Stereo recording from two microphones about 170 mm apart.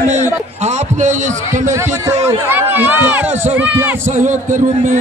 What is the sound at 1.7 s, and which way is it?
Speech, 15° right (ahead or behind).